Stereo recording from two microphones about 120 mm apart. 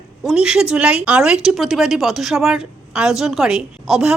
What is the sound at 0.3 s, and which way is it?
A woman's voice, 5° right (ahead or behind).